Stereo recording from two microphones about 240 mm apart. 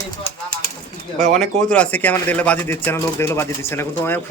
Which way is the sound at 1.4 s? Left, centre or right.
Centre.